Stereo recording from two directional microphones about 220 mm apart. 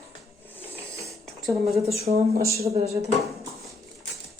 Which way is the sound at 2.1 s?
30° right (ahead or behind).